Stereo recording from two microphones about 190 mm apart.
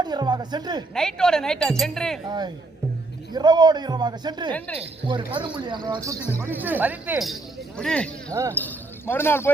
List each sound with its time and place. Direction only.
0.0 s a man's voice: 20° right (ahead or behind)
0.9 s speech: 5° left (ahead or behind)
2.2 s a man's voice: 20° right (ahead or behind)
4.5 s speech: 10° left (ahead or behind)
4.8 s a man's voice: 25° right (ahead or behind)
6.4 s speech: 10° right (ahead or behind)
8.3 s speech: 15° right (ahead or behind)
8.5 s speech: 10° left (ahead or behind)